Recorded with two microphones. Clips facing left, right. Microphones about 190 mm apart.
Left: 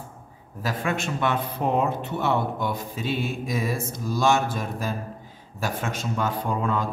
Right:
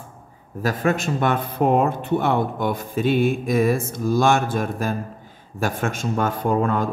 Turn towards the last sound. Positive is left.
turn(degrees=-50)  # may be behind; listen again after turning